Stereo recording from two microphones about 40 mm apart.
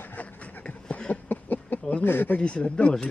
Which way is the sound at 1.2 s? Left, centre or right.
Left.